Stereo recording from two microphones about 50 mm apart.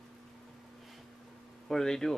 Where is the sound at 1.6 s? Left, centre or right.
Centre.